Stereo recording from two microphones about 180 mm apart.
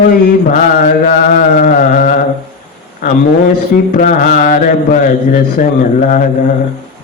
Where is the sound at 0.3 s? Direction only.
50° left (ahead or behind).